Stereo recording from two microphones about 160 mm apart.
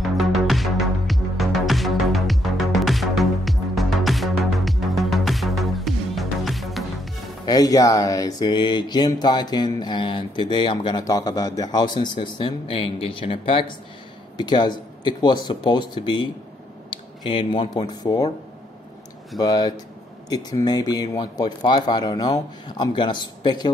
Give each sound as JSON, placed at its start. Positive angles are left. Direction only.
{"t": 0.3, "sound": "music", "side_deg": 0}
{"t": 7.4, "sound": "speech", "side_deg": 25}
{"t": 19.3, "sound": "speech", "side_deg": 25}